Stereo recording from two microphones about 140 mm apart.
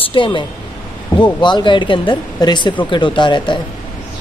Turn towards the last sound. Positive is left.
turn(degrees=35)  # may be behind; listen again after turning